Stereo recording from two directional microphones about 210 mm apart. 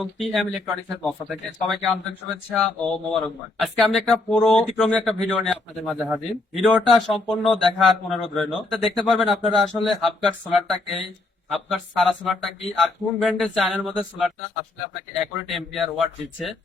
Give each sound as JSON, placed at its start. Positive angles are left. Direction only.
{"t": 0.0, "sound": "speech", "side_deg": 0}